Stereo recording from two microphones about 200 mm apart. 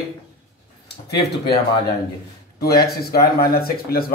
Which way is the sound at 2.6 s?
50° left (ahead or behind).